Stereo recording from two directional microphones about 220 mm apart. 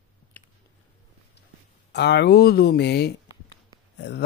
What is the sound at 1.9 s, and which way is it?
Speech, 50° left (ahead or behind).